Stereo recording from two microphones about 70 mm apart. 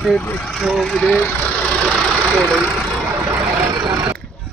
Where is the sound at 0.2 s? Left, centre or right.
Left.